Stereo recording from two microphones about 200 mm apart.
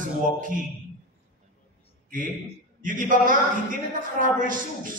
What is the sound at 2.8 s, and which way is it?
Speech, 40° right (ahead or behind).